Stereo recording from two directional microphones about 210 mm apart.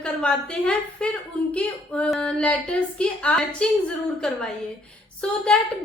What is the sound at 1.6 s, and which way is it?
A woman's voice, 5° left (ahead or behind).